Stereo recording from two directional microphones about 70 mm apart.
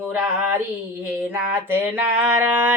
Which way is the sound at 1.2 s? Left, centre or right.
Right.